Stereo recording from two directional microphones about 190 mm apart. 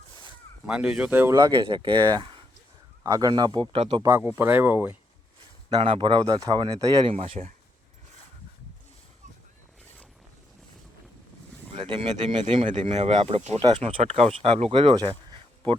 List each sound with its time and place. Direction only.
0.7 s speech: 5° right (ahead or behind)
1.4 s speech: 25° right (ahead or behind)
4.0 s speech: 10° right (ahead or behind)
5.6 s speech: 25° right (ahead or behind)
11.9 s speech: 30° right (ahead or behind)